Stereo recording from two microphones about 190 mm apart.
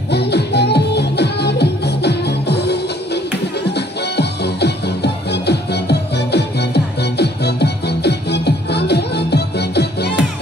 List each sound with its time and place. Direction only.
0.1 s music: 60° left (ahead or behind)